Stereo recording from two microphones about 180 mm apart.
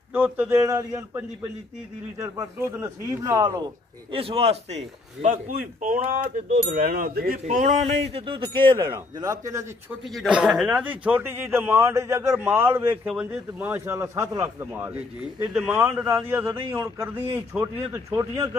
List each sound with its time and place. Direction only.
0.1 s a man's voice: 10° right (ahead or behind)
4.1 s a man's voice: 30° right (ahead or behind); by 7.3 s 55° right (ahead or behind)
7.4 s a man's voice: 45° right (ahead or behind)
8.1 s speech: 30° right (ahead or behind)
10.0 s a man's voice: 5° right (ahead or behind)